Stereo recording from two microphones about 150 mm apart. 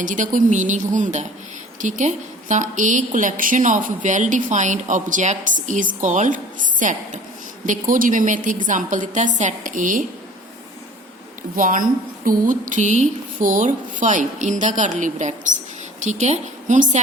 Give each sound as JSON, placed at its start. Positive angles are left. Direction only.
{"t": 0.0, "sound": "a woman's voice", "side_deg": -60}
{"t": 11.5, "sound": "a woman's voice", "side_deg": -65}